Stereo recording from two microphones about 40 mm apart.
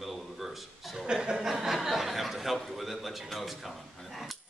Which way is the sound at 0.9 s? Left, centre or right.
Centre.